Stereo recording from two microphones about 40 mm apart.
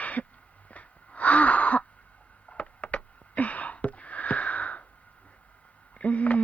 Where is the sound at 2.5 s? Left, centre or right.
Left.